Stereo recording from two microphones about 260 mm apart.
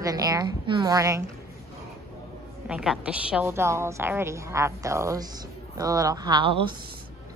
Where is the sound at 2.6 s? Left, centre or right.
Centre.